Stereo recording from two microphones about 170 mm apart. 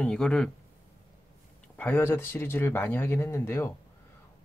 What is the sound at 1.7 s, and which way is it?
Speech, 10° left (ahead or behind).